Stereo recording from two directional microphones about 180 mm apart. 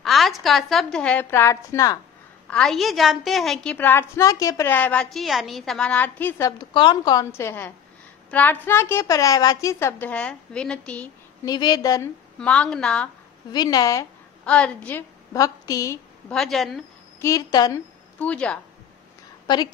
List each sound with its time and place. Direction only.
0.0 s a woman's voice: centre (ahead or behind); by 2.0 s 15° left (ahead or behind)
2.5 s a woman's voice: centre (ahead or behind)
6.7 s a woman's voice: 25° left (ahead or behind); by 11.1 s 5° left (ahead or behind)
11.4 s a woman's voice: 25° left (ahead or behind)
12.4 s a woman's voice: 5° left (ahead or behind)
13.5 s a woman's voice: 20° left (ahead or behind)
14.4 s a woman's voice: 5° left (ahead or behind)
15.3 s a woman's voice: 20° left (ahead or behind)
16.3 s a woman's voice: centre (ahead or behind)
17.2 s a woman's voice: 20° left (ahead or behind)
18.2 s a woman's voice: 5° left (ahead or behind)
19.4 s a woman's voice: 25° left (ahead or behind)